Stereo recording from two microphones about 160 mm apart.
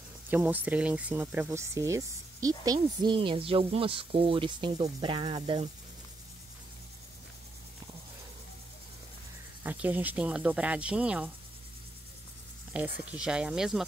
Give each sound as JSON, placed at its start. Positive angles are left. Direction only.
{"t": 0.3, "sound": "speech", "side_deg": -10}
{"t": 9.6, "sound": "speech", "side_deg": -10}
{"t": 12.7, "sound": "speech", "side_deg": -10}